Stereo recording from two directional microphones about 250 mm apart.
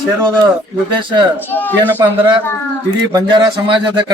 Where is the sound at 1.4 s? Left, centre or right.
Centre.